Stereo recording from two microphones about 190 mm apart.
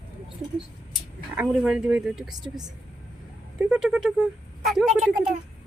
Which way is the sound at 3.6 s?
5° right (ahead or behind).